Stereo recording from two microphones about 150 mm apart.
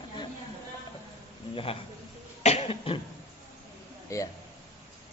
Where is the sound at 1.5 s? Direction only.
40° left (ahead or behind).